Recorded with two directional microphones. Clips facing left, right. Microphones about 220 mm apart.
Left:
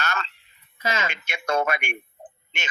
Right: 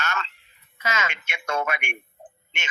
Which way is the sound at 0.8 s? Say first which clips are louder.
Left 1 dB; 35° left (ahead or behind).